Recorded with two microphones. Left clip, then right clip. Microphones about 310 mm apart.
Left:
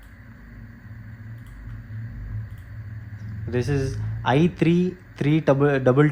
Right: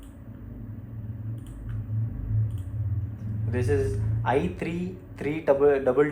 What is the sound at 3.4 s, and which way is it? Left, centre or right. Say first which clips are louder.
A man's voice: even; left.